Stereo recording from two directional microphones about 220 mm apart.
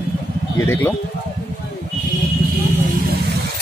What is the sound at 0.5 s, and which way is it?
Speech, 10° left (ahead or behind).